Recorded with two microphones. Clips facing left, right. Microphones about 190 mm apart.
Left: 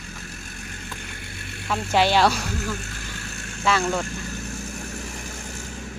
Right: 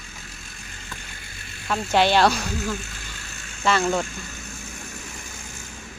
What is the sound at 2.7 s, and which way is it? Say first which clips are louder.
Vehicle: even; 55° left (ahead or behind).